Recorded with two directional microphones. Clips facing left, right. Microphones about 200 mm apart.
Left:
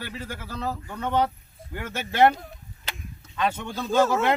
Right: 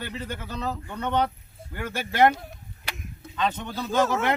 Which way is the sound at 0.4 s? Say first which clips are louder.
Left 2 dB; 20° right (ahead or behind).